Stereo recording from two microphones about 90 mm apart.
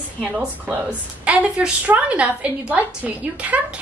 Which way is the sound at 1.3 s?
15° right (ahead or behind).